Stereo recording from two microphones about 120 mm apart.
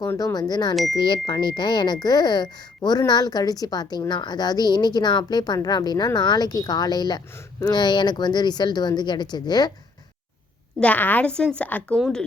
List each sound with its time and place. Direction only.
0.3 s speech: 35° left (ahead or behind)
10.8 s a woman's voice: 10° left (ahead or behind)